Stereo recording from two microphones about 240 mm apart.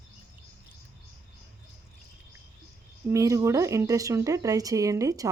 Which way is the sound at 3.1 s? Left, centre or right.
Centre.